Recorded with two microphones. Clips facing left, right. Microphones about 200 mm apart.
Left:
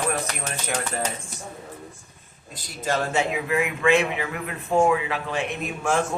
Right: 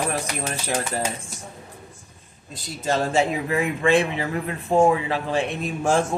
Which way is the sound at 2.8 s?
30° right (ahead or behind).